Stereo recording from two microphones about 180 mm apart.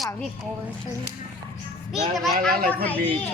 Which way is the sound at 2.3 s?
55° right (ahead or behind).